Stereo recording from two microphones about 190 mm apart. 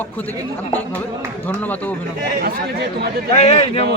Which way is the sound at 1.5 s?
10° left (ahead or behind).